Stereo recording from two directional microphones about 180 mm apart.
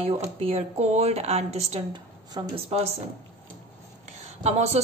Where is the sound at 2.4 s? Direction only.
25° right (ahead or behind).